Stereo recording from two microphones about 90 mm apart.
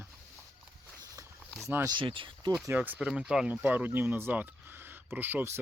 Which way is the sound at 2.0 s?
70° right (ahead or behind).